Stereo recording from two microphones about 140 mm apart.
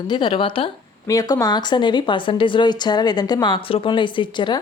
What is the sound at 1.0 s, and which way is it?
Speech, 25° left (ahead or behind).